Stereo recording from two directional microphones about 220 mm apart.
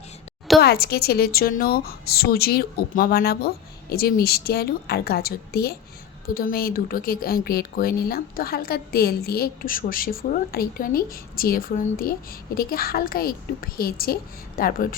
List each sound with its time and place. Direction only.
0.6 s a woman's voice: 45° left (ahead or behind)